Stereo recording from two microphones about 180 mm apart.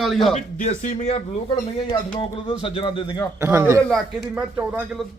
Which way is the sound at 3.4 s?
15° right (ahead or behind).